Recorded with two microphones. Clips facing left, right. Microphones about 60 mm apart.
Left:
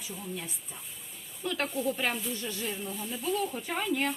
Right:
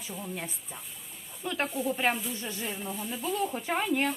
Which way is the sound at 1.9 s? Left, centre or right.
Centre.